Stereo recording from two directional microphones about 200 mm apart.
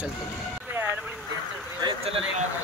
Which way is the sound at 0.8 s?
10° right (ahead or behind).